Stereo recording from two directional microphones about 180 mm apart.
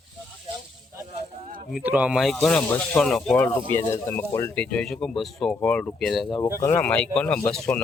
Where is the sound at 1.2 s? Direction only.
40° right (ahead or behind).